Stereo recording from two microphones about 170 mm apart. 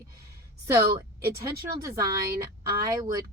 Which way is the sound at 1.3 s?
20° right (ahead or behind).